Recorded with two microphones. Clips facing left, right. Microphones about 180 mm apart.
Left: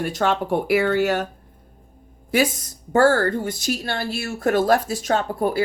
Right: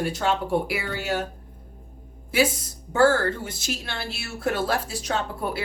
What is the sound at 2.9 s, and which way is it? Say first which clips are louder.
Speech: left 3 dB; 50° left (ahead or behind).